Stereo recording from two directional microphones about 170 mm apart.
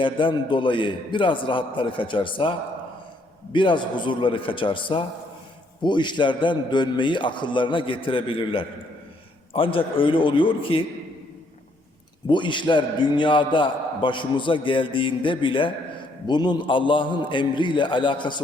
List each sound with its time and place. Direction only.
0.0 s a man's voice: 30° left (ahead or behind)
12.3 s a man's voice: 30° left (ahead or behind)